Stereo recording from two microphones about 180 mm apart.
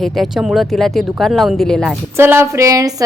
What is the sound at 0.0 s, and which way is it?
Speech, centre (ahead or behind).